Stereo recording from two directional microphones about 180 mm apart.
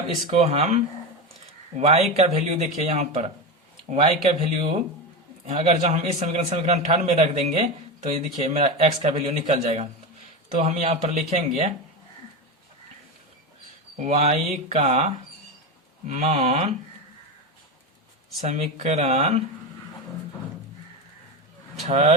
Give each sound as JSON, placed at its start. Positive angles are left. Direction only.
{"t": 0.3, "sound": "a man's voice", "side_deg": -40}
{"t": 13.9, "sound": "a man's voice", "side_deg": -40}
{"t": 18.4, "sound": "a man's voice", "side_deg": -40}
{"t": 21.8, "sound": "a man's voice", "side_deg": -40}